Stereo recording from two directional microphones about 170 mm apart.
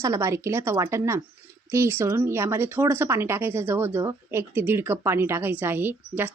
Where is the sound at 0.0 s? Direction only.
15° right (ahead or behind).